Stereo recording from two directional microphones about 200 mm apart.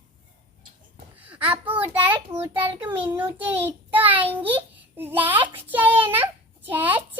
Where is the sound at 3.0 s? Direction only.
10° right (ahead or behind).